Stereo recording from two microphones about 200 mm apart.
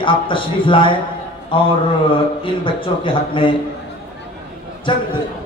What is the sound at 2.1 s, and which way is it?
A man's voice, 25° left (ahead or behind).